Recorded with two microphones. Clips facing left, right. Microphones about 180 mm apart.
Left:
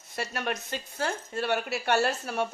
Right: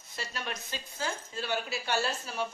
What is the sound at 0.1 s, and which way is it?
Speech, 60° left (ahead or behind).